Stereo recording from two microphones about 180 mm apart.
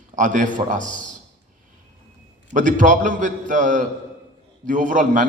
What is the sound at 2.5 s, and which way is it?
A man's voice, 45° right (ahead or behind).